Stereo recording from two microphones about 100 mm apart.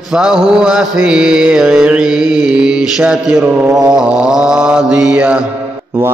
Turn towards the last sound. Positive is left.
turn(degrees=-10)  # may be behind; listen again after turning